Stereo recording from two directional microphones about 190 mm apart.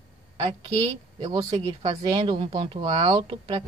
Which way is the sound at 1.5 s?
35° right (ahead or behind).